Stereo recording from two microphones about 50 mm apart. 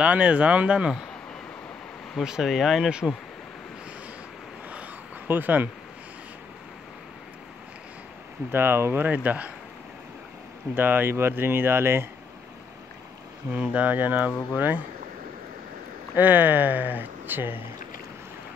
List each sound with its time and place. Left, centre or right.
0.0 s speech: right
2.2 s speech: centre
2.9 s speech: centre
5.3 s speech: right
8.5 s speech: right
9.0 s speech: right
10.8 s speech: right
11.1 s speech: right
13.5 s speech: right
16.2 s speech: right